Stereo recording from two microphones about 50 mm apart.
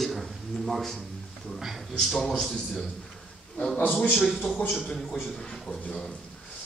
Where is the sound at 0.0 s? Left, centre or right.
Centre.